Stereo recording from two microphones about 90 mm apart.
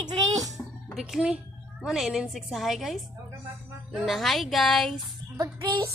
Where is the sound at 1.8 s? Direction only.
5° right (ahead or behind).